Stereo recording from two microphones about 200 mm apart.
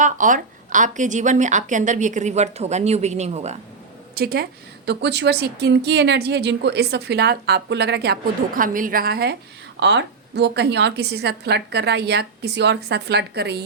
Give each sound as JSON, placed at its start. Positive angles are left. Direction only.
{"t": 0.0, "sound": "a woman's voice", "side_deg": -40}
{"t": 4.1, "sound": "a woman's voice", "side_deg": -50}